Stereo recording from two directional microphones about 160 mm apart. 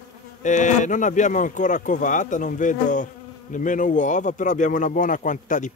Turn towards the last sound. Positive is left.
turn(degrees=55)  # may be behind; listen again after turning